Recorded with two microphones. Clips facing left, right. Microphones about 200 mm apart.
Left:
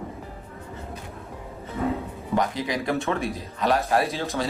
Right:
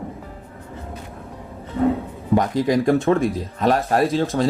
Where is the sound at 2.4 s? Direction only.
50° right (ahead or behind).